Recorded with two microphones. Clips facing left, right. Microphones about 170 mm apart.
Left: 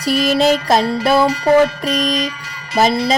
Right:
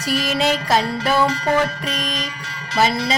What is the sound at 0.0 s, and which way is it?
Music, 35° left (ahead or behind).